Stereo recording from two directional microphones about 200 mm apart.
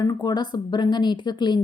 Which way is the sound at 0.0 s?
20° left (ahead or behind).